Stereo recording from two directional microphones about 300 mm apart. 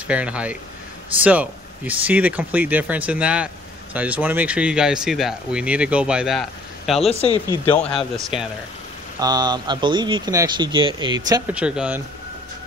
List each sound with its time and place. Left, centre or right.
0.1 s speech: centre
7.0 s speech: centre
8.2 s speech: centre
9.2 s speech: centre